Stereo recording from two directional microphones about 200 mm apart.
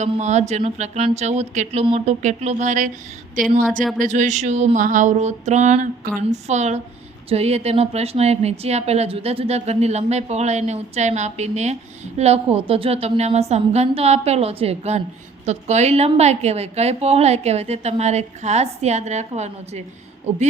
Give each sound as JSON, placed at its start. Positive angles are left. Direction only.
{"t": 0.0, "sound": "a woman's voice", "side_deg": -35}